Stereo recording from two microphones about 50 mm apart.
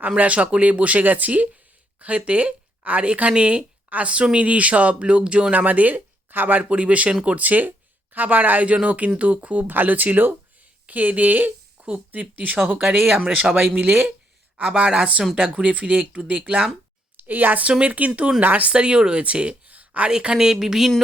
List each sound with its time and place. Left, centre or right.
0.2 s speech: right
5.5 s speech: right
9.6 s speech: right
14.6 s speech: right
17.2 s speech: right
17.7 s speech: right
18.7 s speech: centre
20.1 s speech: centre